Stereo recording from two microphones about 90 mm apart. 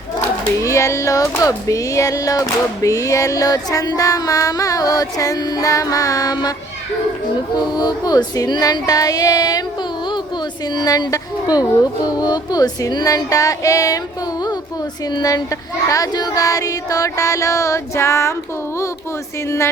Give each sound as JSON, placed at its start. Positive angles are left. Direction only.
{"t": 0.6, "sound": "speech", "side_deg": 35}
{"t": 7.8, "sound": "female singing", "side_deg": 45}
{"t": 10.8, "sound": "female singing", "side_deg": 50}
{"t": 15.1, "sound": "female singing", "side_deg": 50}
{"t": 15.9, "sound": "speech", "side_deg": 45}
{"t": 19.5, "sound": "speech", "side_deg": 30}